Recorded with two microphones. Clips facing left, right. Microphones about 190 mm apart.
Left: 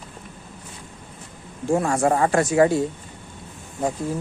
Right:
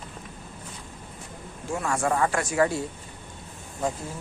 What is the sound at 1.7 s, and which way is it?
Speech, 40° left (ahead or behind).